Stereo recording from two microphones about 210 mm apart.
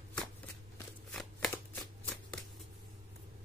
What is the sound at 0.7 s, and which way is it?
Shuffling cards, 5° left (ahead or behind).